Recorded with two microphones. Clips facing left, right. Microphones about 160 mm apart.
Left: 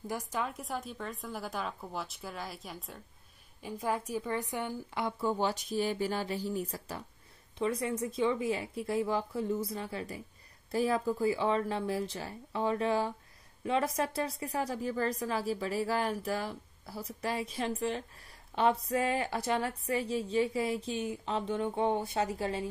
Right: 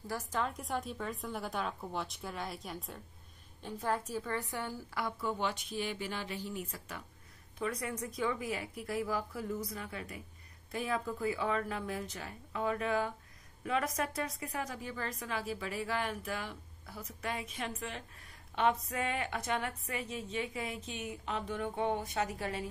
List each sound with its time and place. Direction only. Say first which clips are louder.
0.0 s a woman's voice: left 2 dB; 15° left (ahead or behind)
0.4 s speech: right 3 dB; centre (ahead or behind)
3.6 s a woman's voice: left 2 dB; 10° left (ahead or behind); by 22.7 s 30° left (ahead or behind)